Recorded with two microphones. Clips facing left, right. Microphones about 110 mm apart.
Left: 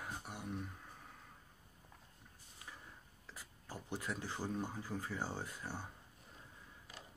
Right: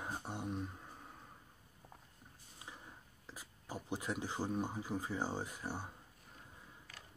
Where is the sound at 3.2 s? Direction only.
15° right (ahead or behind).